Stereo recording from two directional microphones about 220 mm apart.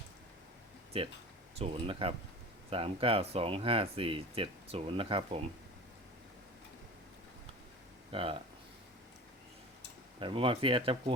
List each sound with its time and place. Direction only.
0.9 s speech: 25° right (ahead or behind)
8.1 s speech: 25° right (ahead or behind)
10.2 s speech: 25° right (ahead or behind)